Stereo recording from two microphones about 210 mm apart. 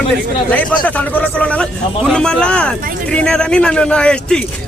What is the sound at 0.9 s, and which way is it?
Speech, 5° left (ahead or behind).